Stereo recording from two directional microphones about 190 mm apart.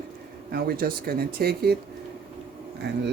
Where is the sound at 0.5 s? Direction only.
55° right (ahead or behind).